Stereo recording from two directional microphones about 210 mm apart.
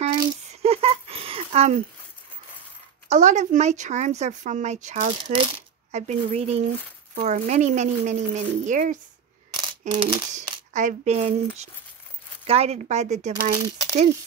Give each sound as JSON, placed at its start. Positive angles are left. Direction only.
{"t": 0.0, "sound": "a sound", "side_deg": -30}
{"t": 3.1, "sound": "speech", "side_deg": -35}
{"t": 5.2, "sound": "speech", "side_deg": -25}
{"t": 9.5, "sound": "camera", "side_deg": -25}
{"t": 10.7, "sound": "speech", "side_deg": -35}